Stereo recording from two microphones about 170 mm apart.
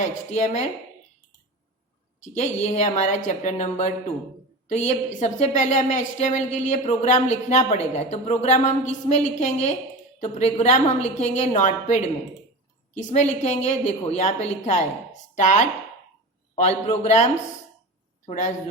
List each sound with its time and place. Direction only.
0.3 s a woman's voice: 40° left (ahead or behind)
2.2 s a woman's voice: 40° left (ahead or behind)
18.3 s a woman's voice: 45° left (ahead or behind)